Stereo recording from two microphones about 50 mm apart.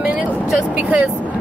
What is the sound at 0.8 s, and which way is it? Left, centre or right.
Speech, right.